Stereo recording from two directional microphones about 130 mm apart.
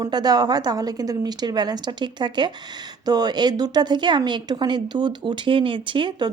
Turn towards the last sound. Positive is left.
turn(degrees=-40)  # may be behind; listen again after turning